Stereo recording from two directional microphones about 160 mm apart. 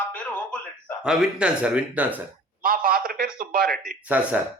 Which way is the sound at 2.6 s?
65° right (ahead or behind).